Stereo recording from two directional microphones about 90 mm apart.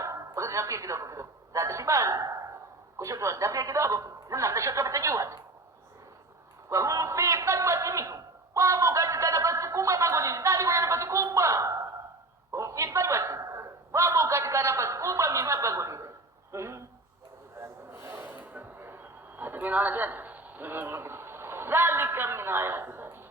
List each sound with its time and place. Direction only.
0.3 s a woman's voice: 35° right (ahead or behind)
6.7 s a man's voice: 35° right (ahead or behind)
16.5 s a sound: 30° right (ahead or behind)
17.6 s snort: 20° right (ahead or behind)
19.4 s a man's voice: 20° right (ahead or behind)